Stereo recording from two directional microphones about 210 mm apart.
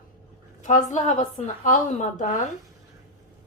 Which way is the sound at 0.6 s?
35° left (ahead or behind).